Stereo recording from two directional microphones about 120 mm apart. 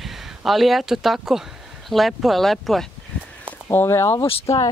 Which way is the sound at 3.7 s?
20° left (ahead or behind).